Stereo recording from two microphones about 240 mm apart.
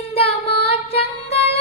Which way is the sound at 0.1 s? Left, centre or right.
Left.